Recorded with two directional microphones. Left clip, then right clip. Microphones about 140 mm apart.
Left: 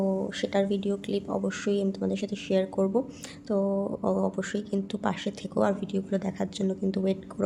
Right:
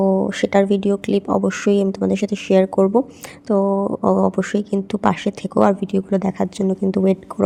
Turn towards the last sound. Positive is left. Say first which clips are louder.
# right 11 dB
turn(degrees=-40)  # may be behind; listen again after turning